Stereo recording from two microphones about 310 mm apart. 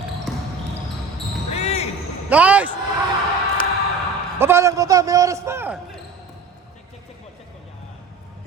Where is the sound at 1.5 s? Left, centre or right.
Centre.